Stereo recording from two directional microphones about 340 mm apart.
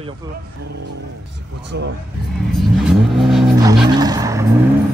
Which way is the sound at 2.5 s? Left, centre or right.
Centre.